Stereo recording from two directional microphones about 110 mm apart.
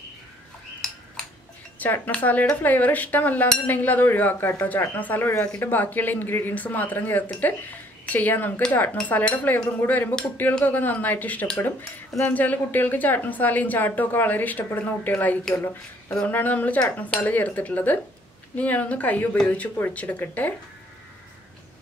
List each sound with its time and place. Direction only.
1.8 s speech: 10° left (ahead or behind)